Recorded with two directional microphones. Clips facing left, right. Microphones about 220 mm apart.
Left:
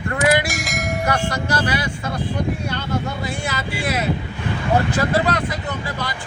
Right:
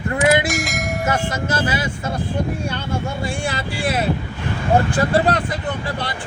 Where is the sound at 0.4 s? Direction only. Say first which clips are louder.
Right 3 dB; centre (ahead or behind).